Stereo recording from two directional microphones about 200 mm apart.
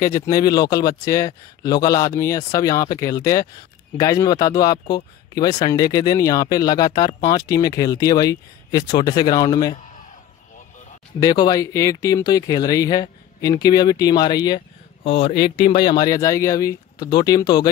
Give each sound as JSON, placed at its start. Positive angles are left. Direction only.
{"t": 0.0, "sound": "speech", "side_deg": 15}
{"t": 11.1, "sound": "speech", "side_deg": 20}
{"t": 15.3, "sound": "speech", "side_deg": 50}
{"t": 15.7, "sound": "speech", "side_deg": 20}